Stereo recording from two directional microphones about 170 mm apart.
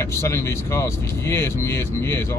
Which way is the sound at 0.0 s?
15° left (ahead or behind).